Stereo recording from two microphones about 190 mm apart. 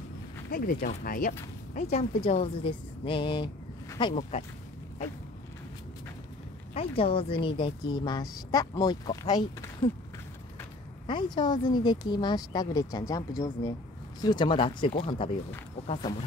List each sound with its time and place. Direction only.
0.5 s speech: 50° left (ahead or behind)
1.7 s a woman's voice: 35° left (ahead or behind)
4.1 s a woman's voice: 35° left (ahead or behind)
6.7 s speech: 30° left (ahead or behind)
11.1 s speech: 25° left (ahead or behind)